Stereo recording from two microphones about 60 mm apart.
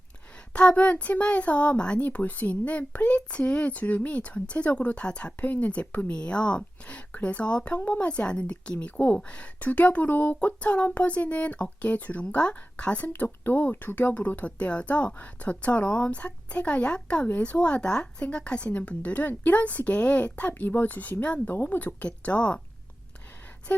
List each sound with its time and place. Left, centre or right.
0.5 s speech: centre
21.5 s speech: left
22.0 s speech: left